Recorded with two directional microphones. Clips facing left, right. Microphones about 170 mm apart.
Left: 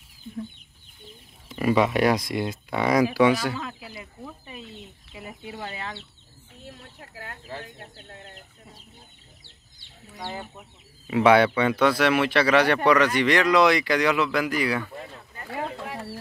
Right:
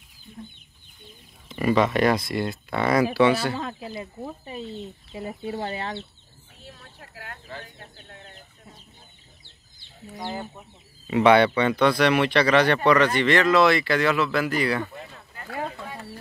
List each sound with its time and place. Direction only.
1.5 s speech: 5° left (ahead or behind)
3.5 s speech: 35° right (ahead or behind)
11.1 s speech: 5° left (ahead or behind)